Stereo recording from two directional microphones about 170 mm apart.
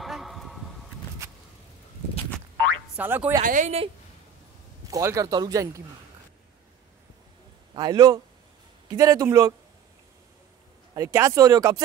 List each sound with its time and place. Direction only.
0.0 s a sound: centre (ahead or behind)
3.0 s speech: 10° right (ahead or behind)
3.4 s speech: 45° right (ahead or behind)
4.8 s a man's voice: 20° right (ahead or behind)
7.7 s a man's voice: 25° right (ahead or behind)
11.0 s a man's voice: 15° right (ahead or behind)